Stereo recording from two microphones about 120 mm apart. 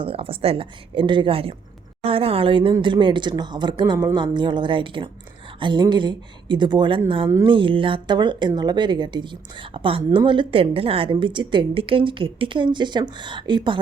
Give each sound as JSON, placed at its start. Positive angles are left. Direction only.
{"t": 0.0, "sound": "speech", "side_deg": -50}